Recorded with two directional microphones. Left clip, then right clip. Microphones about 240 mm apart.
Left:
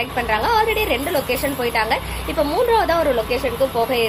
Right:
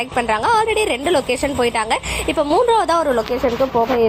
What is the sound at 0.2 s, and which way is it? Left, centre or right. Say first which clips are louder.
A woman's voice: right 2 dB; right.